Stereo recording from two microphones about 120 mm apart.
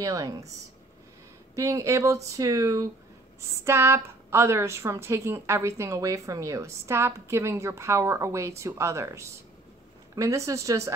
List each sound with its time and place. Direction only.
0.0 s a woman's voice: 30° right (ahead or behind)
1.5 s a woman's voice: 25° right (ahead or behind)